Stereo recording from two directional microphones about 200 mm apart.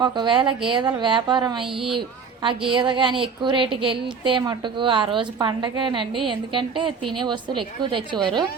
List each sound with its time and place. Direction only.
0.0 s a woman's voice: 25° right (ahead or behind)